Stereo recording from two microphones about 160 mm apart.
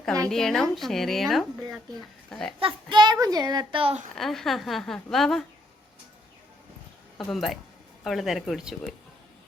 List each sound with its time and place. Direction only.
0.3 s speech: 5° left (ahead or behind)
2.6 s a child's voice: 30° right (ahead or behind)
4.1 s speech: centre (ahead or behind)
7.3 s speech: centre (ahead or behind)